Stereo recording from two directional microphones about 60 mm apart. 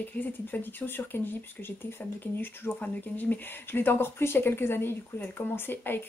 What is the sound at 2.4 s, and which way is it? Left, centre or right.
Speech, left.